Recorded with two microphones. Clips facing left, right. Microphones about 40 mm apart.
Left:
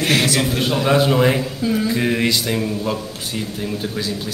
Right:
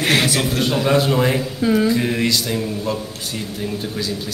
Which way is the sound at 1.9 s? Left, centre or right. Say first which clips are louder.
Even; centre.